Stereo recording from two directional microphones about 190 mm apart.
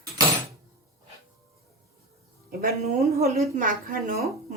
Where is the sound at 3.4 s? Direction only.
45° right (ahead or behind).